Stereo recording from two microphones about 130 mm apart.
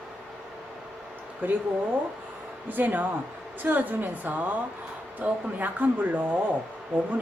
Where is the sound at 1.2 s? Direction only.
15° right (ahead or behind).